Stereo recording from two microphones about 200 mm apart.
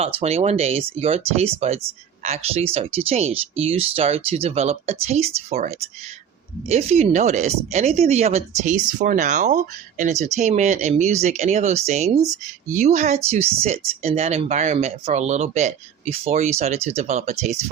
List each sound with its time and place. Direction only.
0.0 s speech: 30° right (ahead or behind)